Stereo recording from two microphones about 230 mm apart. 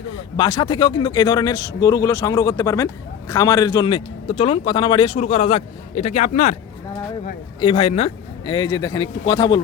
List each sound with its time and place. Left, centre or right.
0.1 s speech: centre
7.6 s speech: left